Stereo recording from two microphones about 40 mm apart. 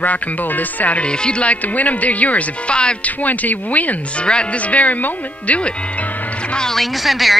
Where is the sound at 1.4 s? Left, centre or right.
Left.